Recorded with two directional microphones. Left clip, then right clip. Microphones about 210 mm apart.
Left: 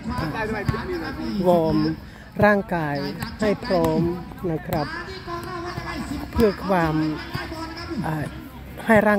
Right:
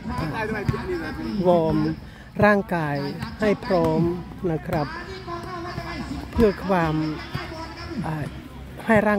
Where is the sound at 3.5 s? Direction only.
5° right (ahead or behind).